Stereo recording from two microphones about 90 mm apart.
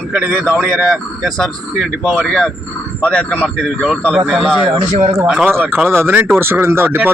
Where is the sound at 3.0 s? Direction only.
10° left (ahead or behind).